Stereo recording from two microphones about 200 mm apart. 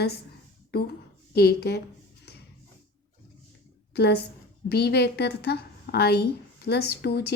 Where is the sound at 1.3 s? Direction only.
55° left (ahead or behind).